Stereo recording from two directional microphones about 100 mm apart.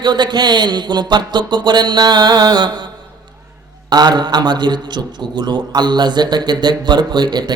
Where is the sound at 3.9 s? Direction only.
45° right (ahead or behind).